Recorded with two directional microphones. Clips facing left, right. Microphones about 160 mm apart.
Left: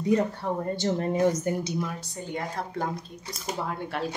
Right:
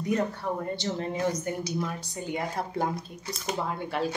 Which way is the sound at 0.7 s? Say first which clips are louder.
Left 5 dB; 45° left (ahead or behind).